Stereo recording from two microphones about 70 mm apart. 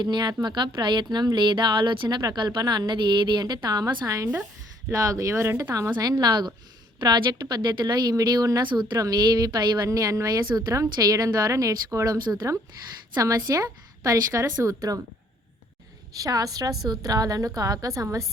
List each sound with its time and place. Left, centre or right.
0.0 s a woman's voice: right
5.9 s speech: right
8.1 s speech: right
9.0 s a woman's voice: right
9.8 s a woman's voice: right
12.0 s speech: right
13.1 s a woman's voice: right
16.1 s a woman's voice: right